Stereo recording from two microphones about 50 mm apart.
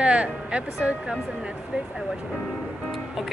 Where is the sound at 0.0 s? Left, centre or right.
Right.